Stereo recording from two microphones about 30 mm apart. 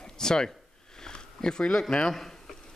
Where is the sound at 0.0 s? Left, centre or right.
Left.